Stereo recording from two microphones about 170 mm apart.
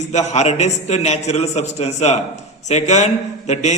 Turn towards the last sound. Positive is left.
turn(degrees=40)  # may be behind; listen again after turning